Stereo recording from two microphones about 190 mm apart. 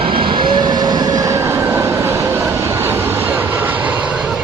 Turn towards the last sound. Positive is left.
turn(degrees=-10)  # may be behind; listen again after turning